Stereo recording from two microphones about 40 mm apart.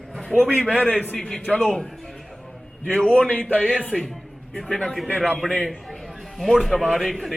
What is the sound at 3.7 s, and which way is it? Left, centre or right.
Speech, left.